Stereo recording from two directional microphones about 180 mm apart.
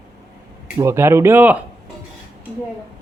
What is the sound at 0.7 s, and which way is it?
Speech, 15° right (ahead or behind).